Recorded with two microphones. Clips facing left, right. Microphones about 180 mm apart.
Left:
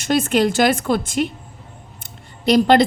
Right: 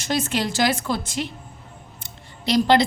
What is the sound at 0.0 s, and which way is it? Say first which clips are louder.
Speech: left 7 dB; 55° left (ahead or behind).